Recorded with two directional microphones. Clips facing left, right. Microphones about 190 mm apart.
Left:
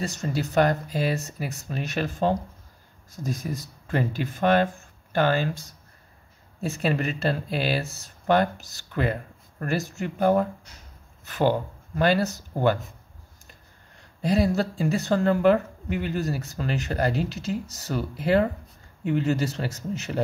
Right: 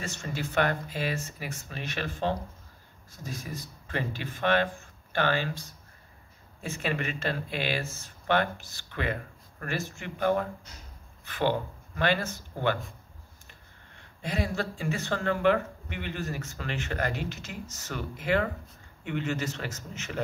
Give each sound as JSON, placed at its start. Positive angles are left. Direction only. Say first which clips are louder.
{"t": 0.0, "sound": "speech", "louder": "left 7 dB", "side_deg": 40}